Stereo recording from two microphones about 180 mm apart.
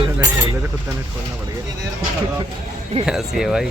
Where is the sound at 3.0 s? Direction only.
5° right (ahead or behind).